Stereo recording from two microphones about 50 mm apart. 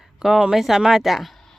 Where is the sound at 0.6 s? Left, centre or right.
Centre.